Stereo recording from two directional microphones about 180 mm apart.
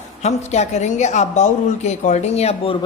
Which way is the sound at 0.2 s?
40° left (ahead or behind).